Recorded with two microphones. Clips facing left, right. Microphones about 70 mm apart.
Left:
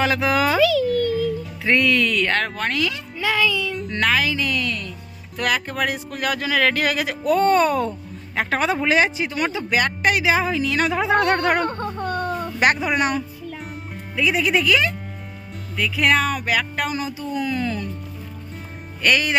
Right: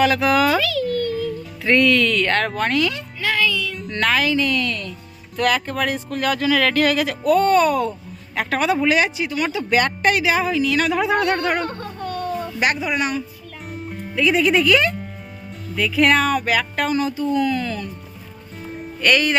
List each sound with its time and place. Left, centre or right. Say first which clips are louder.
0.0 s speech: right 3 dB; left; by 1.3 s centre
1.6 s speech: right 2 dB; centre
3.2 s speech: left 1 dB; centre
3.9 s speech: right 2 dB; centre; by 9.6 s left
9.6 s speech: right 3 dB; centre; by 11.2 s left
11.2 s speech: left 1 dB; left
13.9 s speech: right 3 dB; centre
19.0 s speech: right 2 dB; centre